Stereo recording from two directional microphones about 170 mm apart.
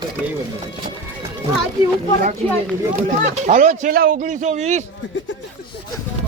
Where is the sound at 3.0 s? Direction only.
45° right (ahead or behind).